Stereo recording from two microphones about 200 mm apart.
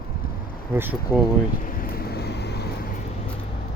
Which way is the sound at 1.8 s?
50° left (ahead or behind).